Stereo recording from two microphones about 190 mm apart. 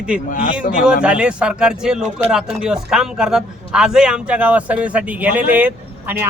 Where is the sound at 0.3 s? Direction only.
45° left (ahead or behind).